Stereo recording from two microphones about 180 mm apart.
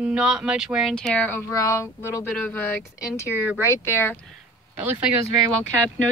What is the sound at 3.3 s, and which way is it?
Speech, 10° right (ahead or behind).